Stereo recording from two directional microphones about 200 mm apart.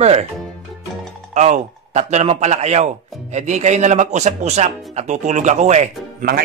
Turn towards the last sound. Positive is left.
turn(degrees=-35)  # may be behind; listen again after turning